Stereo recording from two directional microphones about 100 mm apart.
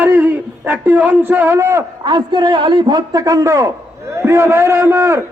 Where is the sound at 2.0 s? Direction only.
50° right (ahead or behind).